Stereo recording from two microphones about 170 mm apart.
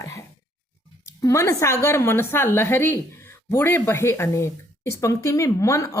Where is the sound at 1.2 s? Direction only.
15° left (ahead or behind).